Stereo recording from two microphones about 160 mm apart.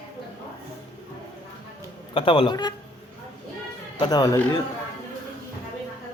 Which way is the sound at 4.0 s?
25° left (ahead or behind).